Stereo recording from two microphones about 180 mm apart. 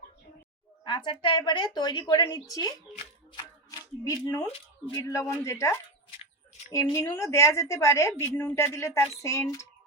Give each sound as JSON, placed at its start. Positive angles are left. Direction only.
{"t": 0.9, "sound": "a woman's voice", "side_deg": 25}
{"t": 3.3, "sound": "shuffling cards", "side_deg": 20}
{"t": 4.9, "sound": "a woman's voice", "side_deg": 15}
{"t": 6.9, "sound": "a woman's voice", "side_deg": 15}